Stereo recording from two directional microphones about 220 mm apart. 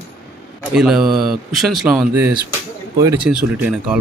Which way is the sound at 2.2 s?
10° right (ahead or behind).